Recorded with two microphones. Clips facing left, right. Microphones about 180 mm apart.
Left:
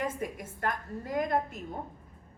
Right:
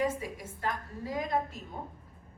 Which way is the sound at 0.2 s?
50° left (ahead or behind).